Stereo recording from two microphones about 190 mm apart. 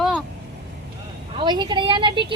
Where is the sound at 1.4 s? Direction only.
20° right (ahead or behind).